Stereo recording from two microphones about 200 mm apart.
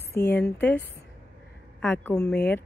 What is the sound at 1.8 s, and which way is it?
Speech, 5° left (ahead or behind).